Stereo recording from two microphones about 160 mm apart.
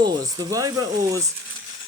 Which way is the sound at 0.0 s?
25° right (ahead or behind).